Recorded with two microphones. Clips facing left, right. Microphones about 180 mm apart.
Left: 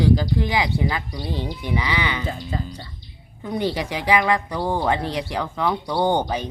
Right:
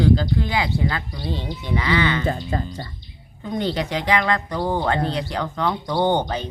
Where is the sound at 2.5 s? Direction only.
55° right (ahead or behind).